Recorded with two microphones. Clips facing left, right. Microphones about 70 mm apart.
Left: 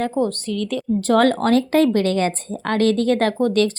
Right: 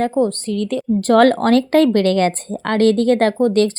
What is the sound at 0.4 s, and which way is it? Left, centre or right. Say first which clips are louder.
A woman's voice: right 3 dB; right.